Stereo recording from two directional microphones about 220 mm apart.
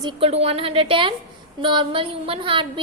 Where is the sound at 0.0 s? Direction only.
25° right (ahead or behind).